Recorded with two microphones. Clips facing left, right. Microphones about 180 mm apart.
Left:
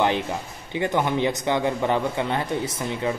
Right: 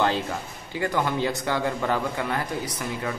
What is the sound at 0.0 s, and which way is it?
A man's voice, 20° left (ahead or behind).